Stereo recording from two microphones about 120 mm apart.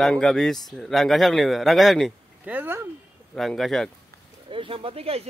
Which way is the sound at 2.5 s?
15° right (ahead or behind).